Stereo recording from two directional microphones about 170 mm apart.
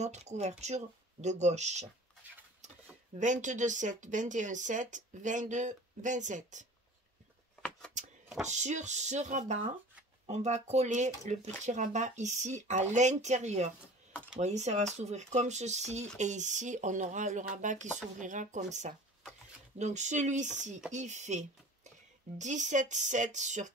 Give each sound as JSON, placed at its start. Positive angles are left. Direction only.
{"t": 0.0, "sound": "speech", "side_deg": -40}
{"t": 3.2, "sound": "speech", "side_deg": -45}
{"t": 8.5, "sound": "speech", "side_deg": -45}